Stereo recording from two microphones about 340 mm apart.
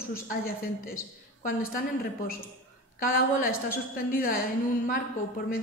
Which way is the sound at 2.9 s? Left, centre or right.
Left.